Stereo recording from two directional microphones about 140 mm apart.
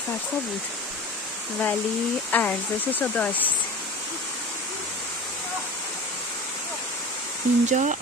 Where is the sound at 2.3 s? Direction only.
10° left (ahead or behind).